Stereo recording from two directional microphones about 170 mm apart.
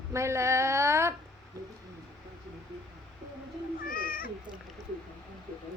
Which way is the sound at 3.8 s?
55° left (ahead or behind).